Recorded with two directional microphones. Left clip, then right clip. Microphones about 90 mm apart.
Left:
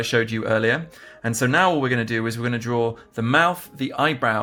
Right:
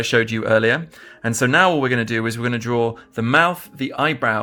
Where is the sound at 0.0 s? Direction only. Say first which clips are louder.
Right 3 dB; 65° right (ahead or behind).